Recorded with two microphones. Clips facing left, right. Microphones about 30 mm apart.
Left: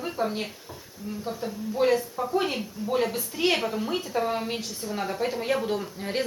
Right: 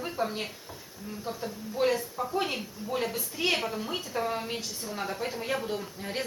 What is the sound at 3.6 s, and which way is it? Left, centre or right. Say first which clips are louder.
Speech: left 5 dB; centre.